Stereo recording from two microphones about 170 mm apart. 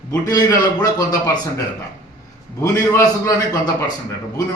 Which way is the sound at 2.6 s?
15° left (ahead or behind).